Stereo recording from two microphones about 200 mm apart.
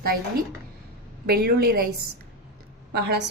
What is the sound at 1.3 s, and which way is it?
Speech, 50° right (ahead or behind).